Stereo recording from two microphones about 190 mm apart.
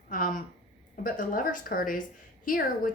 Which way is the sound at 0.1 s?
50° left (ahead or behind).